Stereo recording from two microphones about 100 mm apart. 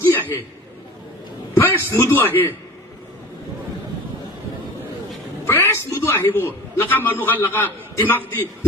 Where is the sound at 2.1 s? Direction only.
20° left (ahead or behind).